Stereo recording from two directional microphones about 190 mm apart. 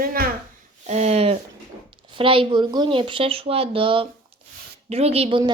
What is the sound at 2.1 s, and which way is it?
A woman's voice, 25° right (ahead or behind).